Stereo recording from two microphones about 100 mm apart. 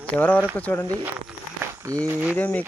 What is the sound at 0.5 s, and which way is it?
Speech, 15° left (ahead or behind).